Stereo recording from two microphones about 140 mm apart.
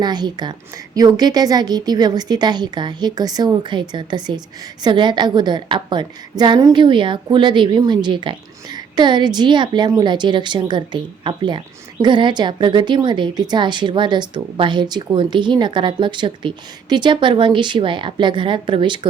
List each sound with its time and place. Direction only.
0.0 s a woman's voice: 30° right (ahead or behind)